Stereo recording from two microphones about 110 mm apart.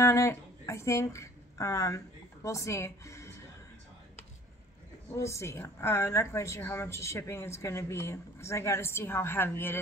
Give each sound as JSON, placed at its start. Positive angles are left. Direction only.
{"t": 0.0, "sound": "speech", "side_deg": 25}
{"t": 5.1, "sound": "speech", "side_deg": 25}